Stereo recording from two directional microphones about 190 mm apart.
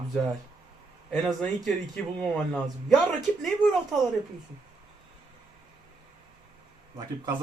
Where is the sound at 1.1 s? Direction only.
Centre (ahead or behind).